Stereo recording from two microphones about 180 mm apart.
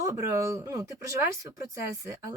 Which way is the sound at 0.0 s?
15° right (ahead or behind).